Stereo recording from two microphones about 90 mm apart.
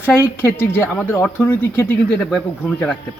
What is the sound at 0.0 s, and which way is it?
A man's voice, 25° left (ahead or behind).